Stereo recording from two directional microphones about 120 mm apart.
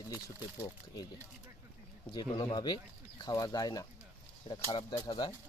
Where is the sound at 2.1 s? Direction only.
35° left (ahead or behind).